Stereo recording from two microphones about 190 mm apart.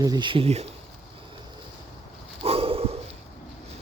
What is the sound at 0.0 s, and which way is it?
Speech, 20° right (ahead or behind).